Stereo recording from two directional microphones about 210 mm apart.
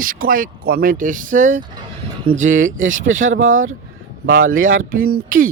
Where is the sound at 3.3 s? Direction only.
40° right (ahead or behind).